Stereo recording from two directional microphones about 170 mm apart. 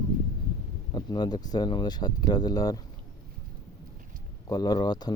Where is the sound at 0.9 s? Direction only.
25° left (ahead or behind).